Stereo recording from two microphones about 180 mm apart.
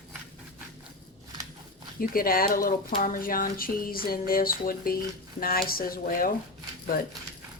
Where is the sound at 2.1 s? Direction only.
55° left (ahead or behind).